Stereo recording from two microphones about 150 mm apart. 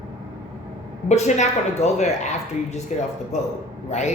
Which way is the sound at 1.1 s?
50° left (ahead or behind).